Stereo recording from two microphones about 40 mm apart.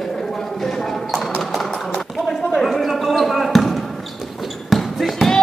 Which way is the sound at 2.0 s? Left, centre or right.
Centre.